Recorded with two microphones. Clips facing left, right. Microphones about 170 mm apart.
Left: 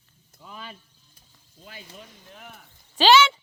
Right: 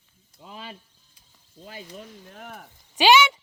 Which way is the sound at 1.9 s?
45° right (ahead or behind).